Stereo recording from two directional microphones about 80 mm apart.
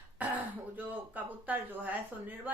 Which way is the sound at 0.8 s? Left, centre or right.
Right.